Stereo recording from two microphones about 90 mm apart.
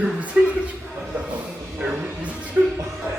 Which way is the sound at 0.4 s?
15° right (ahead or behind).